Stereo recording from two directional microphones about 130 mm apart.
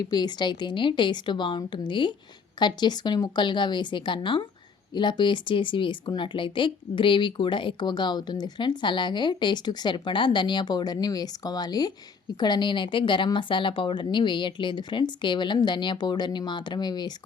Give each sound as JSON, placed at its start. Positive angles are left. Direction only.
{"t": 0.0, "sound": "speech", "side_deg": 30}